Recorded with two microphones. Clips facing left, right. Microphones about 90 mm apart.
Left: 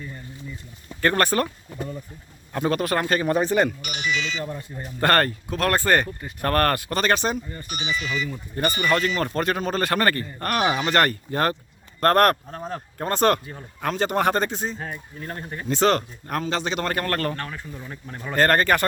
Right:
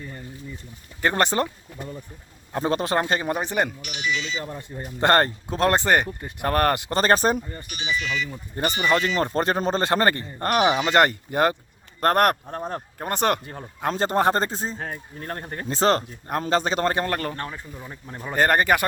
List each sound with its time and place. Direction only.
1.0 s speech: 20° right (ahead or behind)
2.5 s speech: 25° right (ahead or behind)
3.8 s speech: 55° left (ahead or behind)
4.9 s speech: 20° right (ahead or behind)
7.0 s a man's voice: 40° right (ahead or behind)
7.7 s speech: 40° left (ahead or behind)
8.3 s speech: 25° right (ahead or behind)
13.4 s speech: 45° right (ahead or behind)
13.8 s a man's voice: 35° right (ahead or behind)
14.8 s speech: 50° right (ahead or behind)
15.7 s a man's voice: 35° right (ahead or behind)
16.4 s a man's voice: 40° right (ahead or behind)
17.1 s speech: 10° right (ahead or behind)